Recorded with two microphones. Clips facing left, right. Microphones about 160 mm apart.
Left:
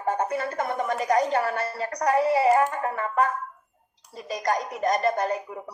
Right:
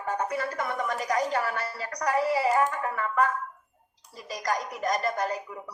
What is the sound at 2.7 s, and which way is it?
Music, 30° left (ahead or behind).